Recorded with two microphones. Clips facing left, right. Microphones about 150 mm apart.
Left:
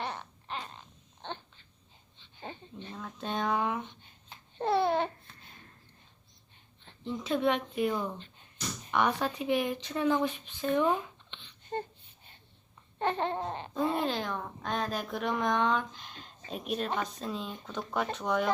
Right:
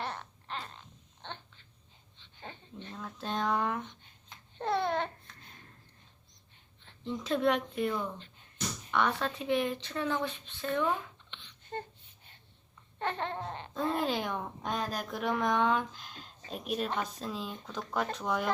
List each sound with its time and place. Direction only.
0.0 s babbling: centre (ahead or behind)
2.4 s a sound: 15° left (ahead or behind)
2.9 s speech: centre (ahead or behind)
4.5 s babbling: 5° left (ahead or behind)
7.0 s speech: centre (ahead or behind)
11.7 s a sound: 15° left (ahead or behind)
13.0 s babbling: 20° left (ahead or behind)
13.7 s a sound: 5° left (ahead or behind)
14.1 s speech: 10° right (ahead or behind)
14.8 s speech: centre (ahead or behind)